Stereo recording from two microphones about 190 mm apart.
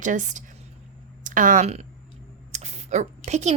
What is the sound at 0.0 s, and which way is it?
A woman's voice, 40° right (ahead or behind).